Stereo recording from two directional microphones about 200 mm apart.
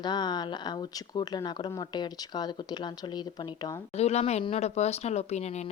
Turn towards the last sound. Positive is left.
turn(degrees=35)  # may be behind; listen again after turning